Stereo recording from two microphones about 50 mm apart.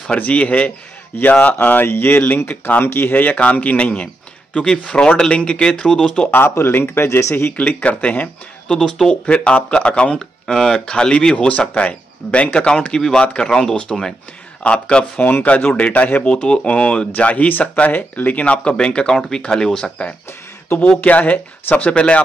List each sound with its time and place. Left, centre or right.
0.2 s a man's voice: left
2.8 s a man's voice: left; by 6.3 s centre
6.5 s speech: left
7.5 s speech: left
8.6 s speech: centre
9.2 s speech: left
10.4 s speech: centre
15.1 s a man's voice: left